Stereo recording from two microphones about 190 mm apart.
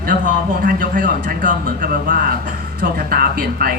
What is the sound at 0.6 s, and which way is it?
Speech, 45° right (ahead or behind).